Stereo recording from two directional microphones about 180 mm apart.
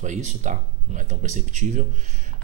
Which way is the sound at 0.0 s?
40° right (ahead or behind).